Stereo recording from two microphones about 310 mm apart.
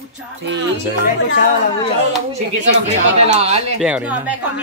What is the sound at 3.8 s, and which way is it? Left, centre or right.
Speech, centre.